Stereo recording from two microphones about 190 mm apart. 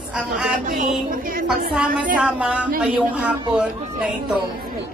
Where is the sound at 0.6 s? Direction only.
40° right (ahead or behind).